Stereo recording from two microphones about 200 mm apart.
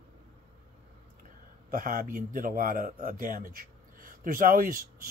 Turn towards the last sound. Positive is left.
turn(degrees=-45)  # may be behind; listen again after turning